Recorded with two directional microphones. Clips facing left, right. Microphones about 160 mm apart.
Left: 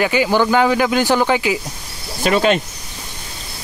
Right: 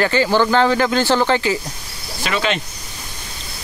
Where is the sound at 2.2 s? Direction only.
45° left (ahead or behind).